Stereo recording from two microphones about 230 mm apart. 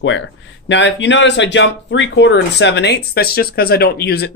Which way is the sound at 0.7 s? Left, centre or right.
Left.